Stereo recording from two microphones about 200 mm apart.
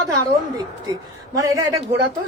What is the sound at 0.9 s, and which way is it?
Speech, 15° right (ahead or behind).